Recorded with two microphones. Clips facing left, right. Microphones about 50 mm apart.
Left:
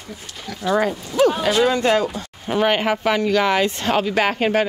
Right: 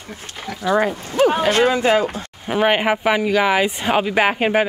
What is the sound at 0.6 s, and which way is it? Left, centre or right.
Speech, centre.